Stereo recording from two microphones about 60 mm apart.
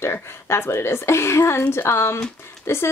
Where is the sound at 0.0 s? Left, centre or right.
Left.